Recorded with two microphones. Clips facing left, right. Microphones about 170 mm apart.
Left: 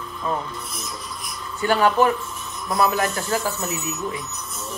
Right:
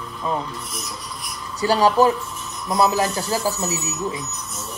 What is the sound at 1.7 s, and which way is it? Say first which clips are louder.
Speech: right 2 dB; 35° right (ahead or behind).